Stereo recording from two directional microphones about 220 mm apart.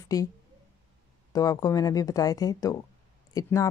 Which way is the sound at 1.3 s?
15° left (ahead or behind).